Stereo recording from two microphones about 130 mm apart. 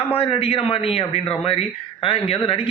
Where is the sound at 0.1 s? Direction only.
45° left (ahead or behind).